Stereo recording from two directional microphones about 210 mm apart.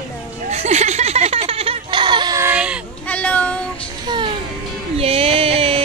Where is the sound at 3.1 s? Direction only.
5° left (ahead or behind).